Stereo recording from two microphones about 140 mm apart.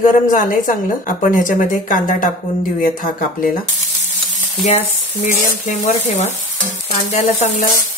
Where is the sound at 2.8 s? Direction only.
85° left.